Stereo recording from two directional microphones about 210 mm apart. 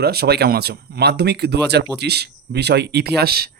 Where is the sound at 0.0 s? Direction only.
50° right (ahead or behind).